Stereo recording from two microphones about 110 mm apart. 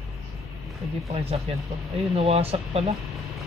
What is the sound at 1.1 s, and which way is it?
Speech, 60° right (ahead or behind).